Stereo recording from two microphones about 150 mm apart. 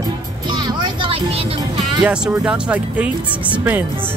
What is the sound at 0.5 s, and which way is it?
Speech, 30° right (ahead or behind).